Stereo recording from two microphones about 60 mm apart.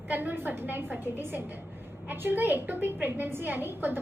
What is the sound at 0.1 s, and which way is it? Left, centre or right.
A woman's voice, right.